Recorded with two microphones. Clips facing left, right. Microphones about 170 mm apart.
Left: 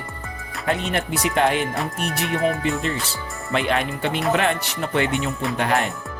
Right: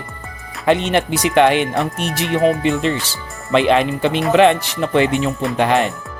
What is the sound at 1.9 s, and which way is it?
Speech, 90° right.